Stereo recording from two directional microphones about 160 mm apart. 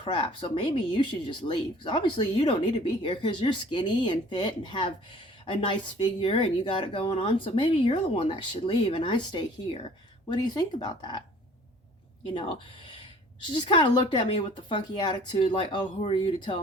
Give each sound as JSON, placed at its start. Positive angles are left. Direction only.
{"t": 0.0, "sound": "speech", "side_deg": 30}
{"t": 12.2, "sound": "speech", "side_deg": 30}